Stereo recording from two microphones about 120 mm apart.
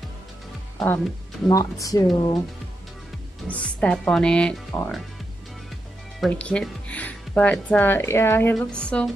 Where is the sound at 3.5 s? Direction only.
10° left (ahead or behind).